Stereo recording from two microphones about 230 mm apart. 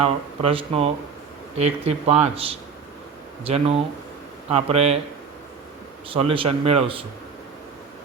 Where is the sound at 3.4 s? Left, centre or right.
Right.